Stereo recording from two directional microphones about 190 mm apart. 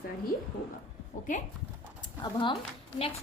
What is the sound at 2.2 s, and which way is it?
Speech, 25° left (ahead or behind).